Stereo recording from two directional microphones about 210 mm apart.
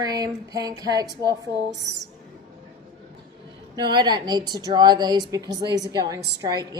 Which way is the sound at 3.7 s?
20° right (ahead or behind).